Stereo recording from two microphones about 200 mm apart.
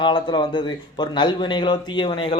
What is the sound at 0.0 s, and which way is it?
Speech, 25° left (ahead or behind).